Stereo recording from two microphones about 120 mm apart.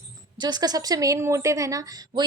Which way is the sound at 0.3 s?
35° right (ahead or behind).